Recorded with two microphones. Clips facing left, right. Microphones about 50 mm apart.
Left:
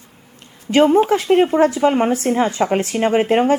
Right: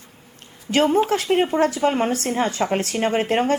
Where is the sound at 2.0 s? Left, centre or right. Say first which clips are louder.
Left 5 dB; centre.